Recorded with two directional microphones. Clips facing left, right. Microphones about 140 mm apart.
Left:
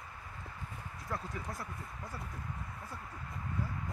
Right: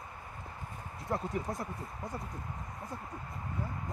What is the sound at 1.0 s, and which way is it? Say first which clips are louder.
Speech: right 7 dB; 25° right (ahead or behind).